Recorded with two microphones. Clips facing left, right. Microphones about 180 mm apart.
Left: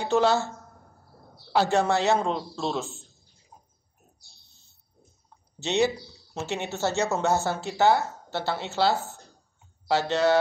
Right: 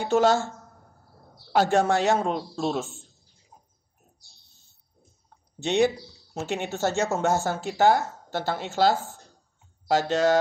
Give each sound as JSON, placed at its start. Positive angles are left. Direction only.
{"t": 0.0, "sound": "speech", "side_deg": -45}
{"t": 1.5, "sound": "speech", "side_deg": -50}
{"t": 5.6, "sound": "speech", "side_deg": -50}